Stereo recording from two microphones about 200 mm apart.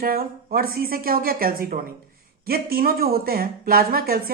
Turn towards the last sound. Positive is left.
turn(degrees=-50)  # may be behind; listen again after turning